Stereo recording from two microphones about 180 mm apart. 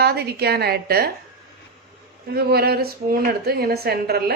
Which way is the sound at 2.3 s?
60° right (ahead or behind).